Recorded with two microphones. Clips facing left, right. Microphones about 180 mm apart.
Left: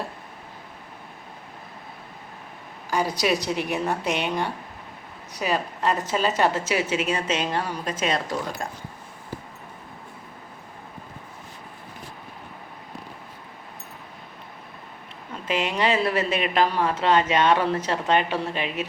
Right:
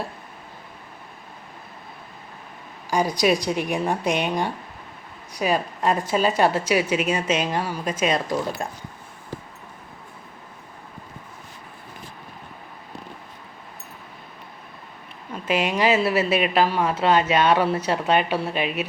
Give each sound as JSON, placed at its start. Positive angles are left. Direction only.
{"t": 2.9, "sound": "speech", "side_deg": -15}
{"t": 15.4, "sound": "speech", "side_deg": -10}